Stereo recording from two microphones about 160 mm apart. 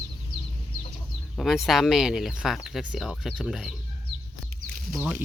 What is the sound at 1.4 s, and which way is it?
Speech, centre (ahead or behind).